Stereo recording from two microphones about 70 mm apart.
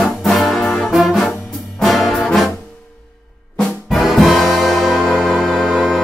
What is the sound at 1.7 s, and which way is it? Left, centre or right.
Brass instrument, centre.